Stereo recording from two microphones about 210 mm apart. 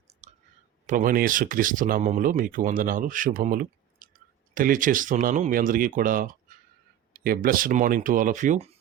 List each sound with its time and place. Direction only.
0.2 s clicking: 30° right (ahead or behind)
0.9 s speech: 40° right (ahead or behind)
7.3 s speech: 45° right (ahead or behind)